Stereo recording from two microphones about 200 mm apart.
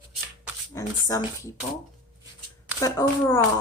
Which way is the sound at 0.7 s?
15° left (ahead or behind).